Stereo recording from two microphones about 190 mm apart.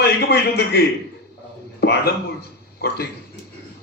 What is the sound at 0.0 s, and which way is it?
Speech, 60° left (ahead or behind).